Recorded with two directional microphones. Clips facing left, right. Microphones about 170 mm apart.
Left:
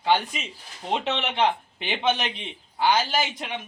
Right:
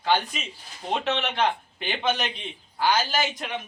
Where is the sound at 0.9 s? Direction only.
20° left (ahead or behind).